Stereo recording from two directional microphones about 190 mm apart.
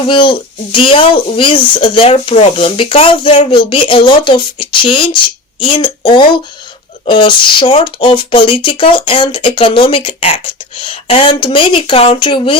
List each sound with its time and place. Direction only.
0.1 s speech: 25° left (ahead or behind)